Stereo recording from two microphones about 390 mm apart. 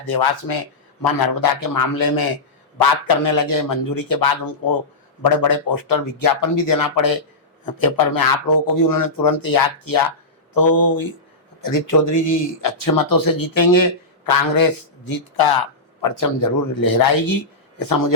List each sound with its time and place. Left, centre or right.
0.0 s speech: left
3.2 s speech: left
11.6 s speech: left